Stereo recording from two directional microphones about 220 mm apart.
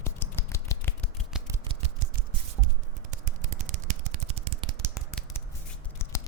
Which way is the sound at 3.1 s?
35° right (ahead or behind).